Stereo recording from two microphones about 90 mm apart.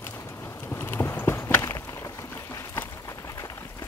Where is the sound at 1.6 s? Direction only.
40° left (ahead or behind).